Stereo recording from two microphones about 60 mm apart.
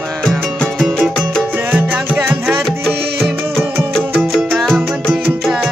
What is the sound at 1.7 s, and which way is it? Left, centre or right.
Music, right.